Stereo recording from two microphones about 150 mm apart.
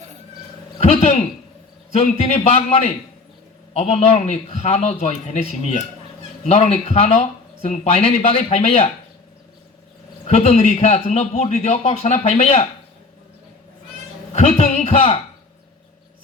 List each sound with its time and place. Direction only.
0.8 s speech: 45° left (ahead or behind)
10.2 s speech: 45° left (ahead or behind)
14.3 s speech: 50° left (ahead or behind)